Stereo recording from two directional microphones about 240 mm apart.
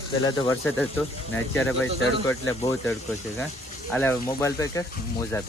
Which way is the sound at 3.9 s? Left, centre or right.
Centre.